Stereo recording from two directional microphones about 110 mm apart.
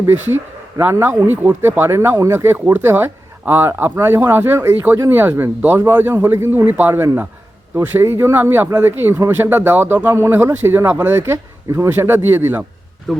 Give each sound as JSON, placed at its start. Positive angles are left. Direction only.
{"t": 0.8, "sound": "speech", "side_deg": -20}
{"t": 13.1, "sound": "speech", "side_deg": 0}